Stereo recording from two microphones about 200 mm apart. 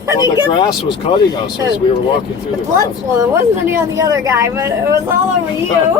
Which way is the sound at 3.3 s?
10° right (ahead or behind).